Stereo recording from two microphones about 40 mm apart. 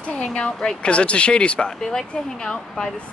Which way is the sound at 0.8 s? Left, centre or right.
Left.